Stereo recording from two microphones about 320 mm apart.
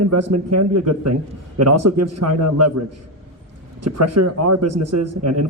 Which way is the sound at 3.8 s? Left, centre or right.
Right.